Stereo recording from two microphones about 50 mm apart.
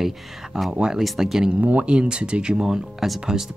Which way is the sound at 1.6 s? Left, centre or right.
Right.